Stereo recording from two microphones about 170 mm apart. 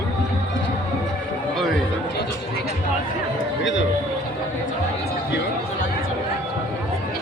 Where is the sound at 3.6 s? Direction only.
90° left.